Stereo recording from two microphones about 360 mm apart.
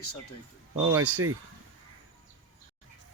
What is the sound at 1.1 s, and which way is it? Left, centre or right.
Speech, right.